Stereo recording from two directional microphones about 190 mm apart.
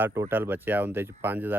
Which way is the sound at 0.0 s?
10° right (ahead or behind).